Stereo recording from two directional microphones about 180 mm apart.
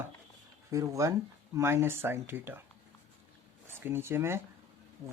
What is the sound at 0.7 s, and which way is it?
Speech, 15° right (ahead or behind).